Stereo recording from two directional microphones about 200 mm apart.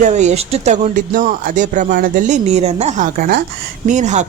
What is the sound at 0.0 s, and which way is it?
Speech, 35° right (ahead or behind).